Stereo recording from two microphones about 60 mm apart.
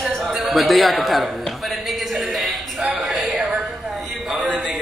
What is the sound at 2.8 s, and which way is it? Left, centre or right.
Music, centre.